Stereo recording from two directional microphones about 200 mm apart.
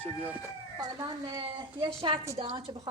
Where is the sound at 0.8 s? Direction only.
20° right (ahead or behind).